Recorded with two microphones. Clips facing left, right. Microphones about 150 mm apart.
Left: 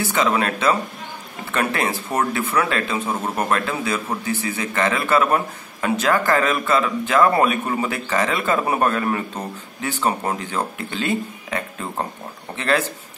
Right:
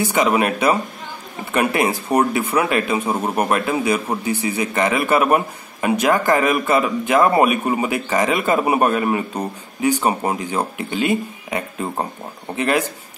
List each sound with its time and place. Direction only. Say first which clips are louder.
0.0 s speech: right 3 dB; 15° right (ahead or behind)